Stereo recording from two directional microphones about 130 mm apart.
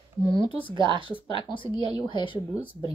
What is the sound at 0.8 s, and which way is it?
Speech, 40° right (ahead or behind).